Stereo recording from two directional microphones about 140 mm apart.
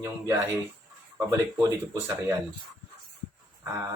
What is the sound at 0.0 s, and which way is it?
Speech, 20° right (ahead or behind).